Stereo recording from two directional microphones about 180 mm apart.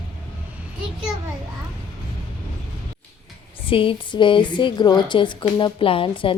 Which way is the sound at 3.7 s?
30° left (ahead or behind).